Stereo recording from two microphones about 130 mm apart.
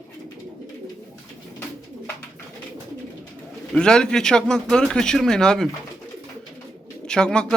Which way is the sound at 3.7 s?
5° left (ahead or behind).